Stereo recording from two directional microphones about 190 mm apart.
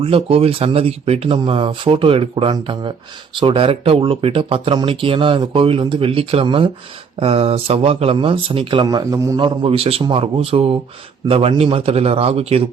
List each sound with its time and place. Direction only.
0.0 s a man's voice: 30° right (ahead or behind)